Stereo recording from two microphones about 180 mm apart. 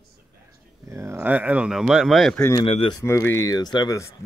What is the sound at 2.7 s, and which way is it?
Speech, 30° left (ahead or behind).